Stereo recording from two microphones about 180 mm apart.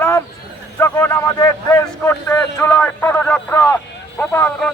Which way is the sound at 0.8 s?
15° left (ahead or behind).